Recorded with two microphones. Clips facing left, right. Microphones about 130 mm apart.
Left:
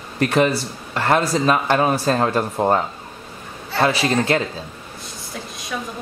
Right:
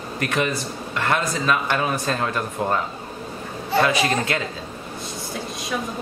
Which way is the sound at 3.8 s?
30° left (ahead or behind).